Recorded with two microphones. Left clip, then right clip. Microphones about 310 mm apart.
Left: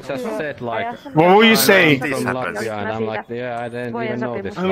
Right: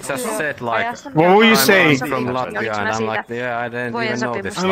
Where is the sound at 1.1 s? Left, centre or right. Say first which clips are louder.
Even; centre.